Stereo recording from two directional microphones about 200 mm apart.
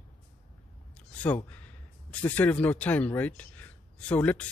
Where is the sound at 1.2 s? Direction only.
5° left (ahead or behind).